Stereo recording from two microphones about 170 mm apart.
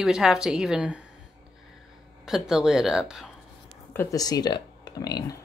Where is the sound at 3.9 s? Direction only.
15° left (ahead or behind).